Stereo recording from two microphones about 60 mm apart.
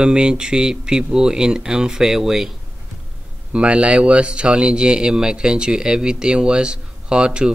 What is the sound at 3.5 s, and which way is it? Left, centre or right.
Speech, centre.